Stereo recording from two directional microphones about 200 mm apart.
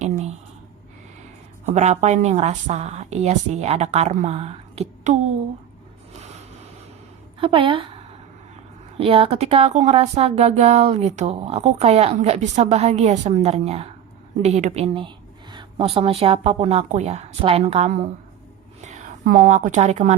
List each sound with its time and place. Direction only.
1.6 s speech: 35° right (ahead or behind)
7.3 s a woman's voice: 25° right (ahead or behind)
14.4 s a sound: 35° right (ahead or behind)
16.0 s a woman's voice: 25° right (ahead or behind)